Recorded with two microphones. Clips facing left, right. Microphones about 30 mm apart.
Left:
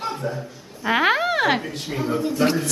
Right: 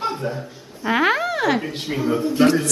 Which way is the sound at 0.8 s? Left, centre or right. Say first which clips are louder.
Even; centre.